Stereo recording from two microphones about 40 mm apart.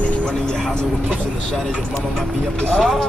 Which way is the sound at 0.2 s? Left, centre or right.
Left.